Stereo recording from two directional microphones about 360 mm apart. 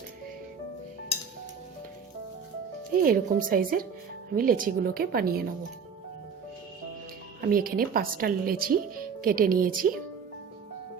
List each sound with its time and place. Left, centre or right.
2.9 s speech: right
7.4 s speech: right